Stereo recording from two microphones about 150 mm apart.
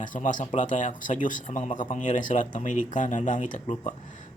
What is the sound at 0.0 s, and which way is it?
Speech, 60° left (ahead or behind).